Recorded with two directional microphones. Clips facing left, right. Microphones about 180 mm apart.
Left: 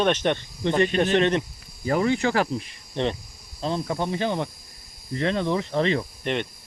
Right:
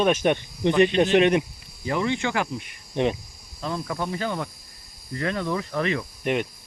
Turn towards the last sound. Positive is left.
turn(degrees=-10)  # may be behind; listen again after turning